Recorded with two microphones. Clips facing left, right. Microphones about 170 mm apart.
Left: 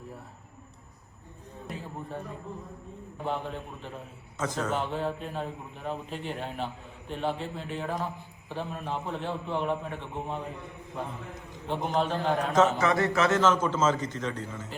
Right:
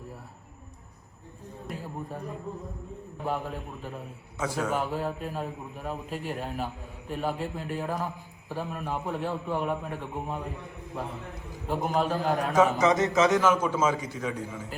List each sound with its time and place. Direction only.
1.7 s a sound: centre (ahead or behind)
3.2 s a man's voice: 5° right (ahead or behind)
11.7 s a man's voice: 5° right (ahead or behind)